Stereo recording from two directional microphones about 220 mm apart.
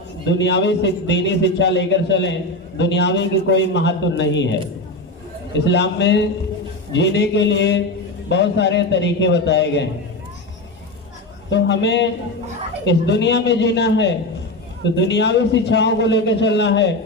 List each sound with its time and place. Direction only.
0.3 s a man's voice: 55° left (ahead or behind)
5.5 s a man's voice: 50° left (ahead or behind)
11.5 s a man's voice: 55° left (ahead or behind)